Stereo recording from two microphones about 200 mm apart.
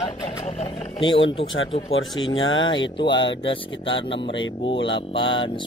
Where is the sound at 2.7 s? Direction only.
65° left (ahead or behind).